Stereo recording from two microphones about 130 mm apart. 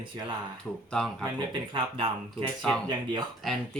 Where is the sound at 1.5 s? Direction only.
40° right (ahead or behind).